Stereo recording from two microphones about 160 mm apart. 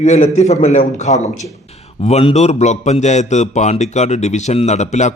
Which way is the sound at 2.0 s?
40° left (ahead or behind).